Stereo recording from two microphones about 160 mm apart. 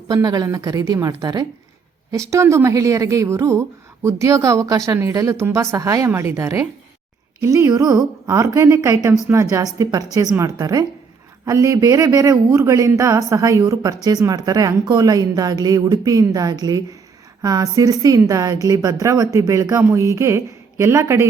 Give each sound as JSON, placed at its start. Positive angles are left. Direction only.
{"t": 0.1, "sound": "a woman's voice", "side_deg": -25}